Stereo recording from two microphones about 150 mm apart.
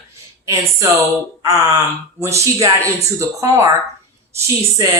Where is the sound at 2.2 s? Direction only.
20° right (ahead or behind).